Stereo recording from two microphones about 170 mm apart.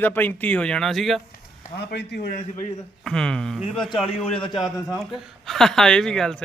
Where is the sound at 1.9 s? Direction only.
80° left.